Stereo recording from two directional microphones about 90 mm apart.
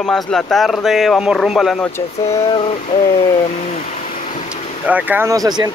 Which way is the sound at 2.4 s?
90° left.